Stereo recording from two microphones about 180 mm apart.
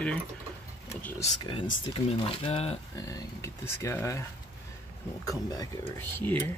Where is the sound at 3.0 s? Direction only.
20° left (ahead or behind).